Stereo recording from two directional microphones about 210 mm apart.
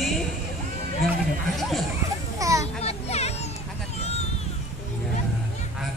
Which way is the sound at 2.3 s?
15° right (ahead or behind).